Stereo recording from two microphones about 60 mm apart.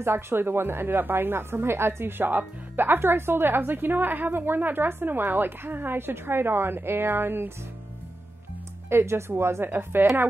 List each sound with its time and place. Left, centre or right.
0.0 s speech: right
8.8 s speech: right